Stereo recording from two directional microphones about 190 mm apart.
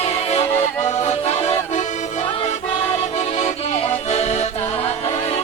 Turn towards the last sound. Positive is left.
turn(degrees=35)  # may be behind; listen again after turning